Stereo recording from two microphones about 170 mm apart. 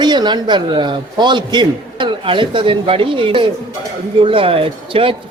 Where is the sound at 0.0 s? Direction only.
25° right (ahead or behind).